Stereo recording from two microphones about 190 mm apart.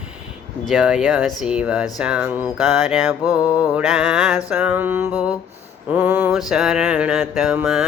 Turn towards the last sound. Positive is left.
turn(degrees=-5)  # may be behind; listen again after turning